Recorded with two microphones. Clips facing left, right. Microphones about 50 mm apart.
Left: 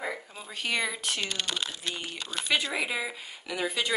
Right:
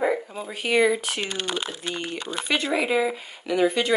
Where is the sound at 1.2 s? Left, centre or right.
Right.